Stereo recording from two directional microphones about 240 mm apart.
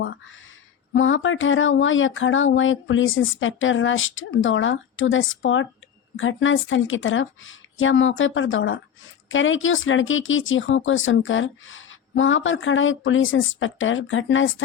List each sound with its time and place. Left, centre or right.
0.9 s speech: left